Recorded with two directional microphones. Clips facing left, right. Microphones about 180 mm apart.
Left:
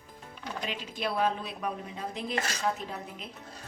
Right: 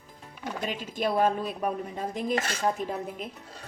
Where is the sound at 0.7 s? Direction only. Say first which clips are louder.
Right 6 dB; 45° right (ahead or behind).